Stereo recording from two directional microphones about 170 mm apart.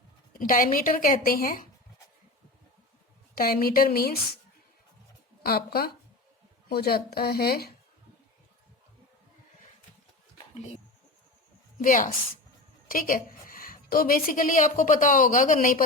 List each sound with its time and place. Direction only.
0.3 s a woman's voice: 55° left (ahead or behind)
3.3 s speech: 60° left (ahead or behind)
5.4 s speech: 60° left (ahead or behind)
11.8 s a woman's voice: 50° left (ahead or behind)